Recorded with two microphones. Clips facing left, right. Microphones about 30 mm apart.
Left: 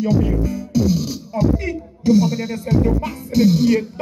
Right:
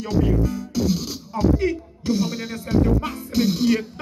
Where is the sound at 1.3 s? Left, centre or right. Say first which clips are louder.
Even; right.